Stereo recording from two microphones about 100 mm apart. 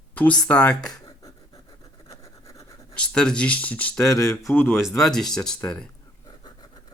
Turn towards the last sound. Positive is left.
turn(degrees=5)  # may be behind; listen again after turning